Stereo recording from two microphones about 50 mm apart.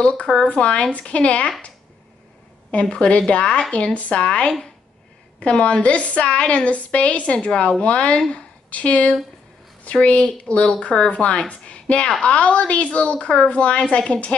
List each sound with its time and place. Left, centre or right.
0.0 s a woman's voice: left
2.7 s a woman's voice: left